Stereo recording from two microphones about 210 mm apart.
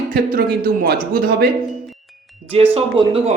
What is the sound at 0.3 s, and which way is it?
Speech, 45° right (ahead or behind).